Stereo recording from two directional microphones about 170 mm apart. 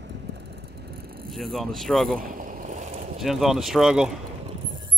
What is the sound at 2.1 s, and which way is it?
Boat, 55° right (ahead or behind).